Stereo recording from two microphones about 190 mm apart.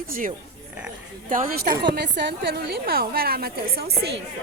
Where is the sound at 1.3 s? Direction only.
50° right (ahead or behind).